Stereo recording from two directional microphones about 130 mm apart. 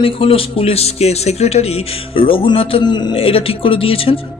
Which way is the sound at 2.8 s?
35° left (ahead or behind).